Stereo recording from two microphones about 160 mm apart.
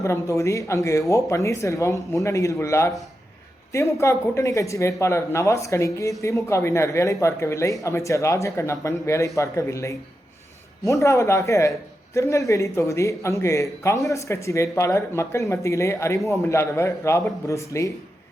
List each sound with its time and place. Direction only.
0.0 s a man's voice: 20° left (ahead or behind)